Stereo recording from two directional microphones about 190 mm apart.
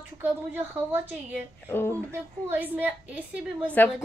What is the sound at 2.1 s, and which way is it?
A woman's voice, 10° right (ahead or behind).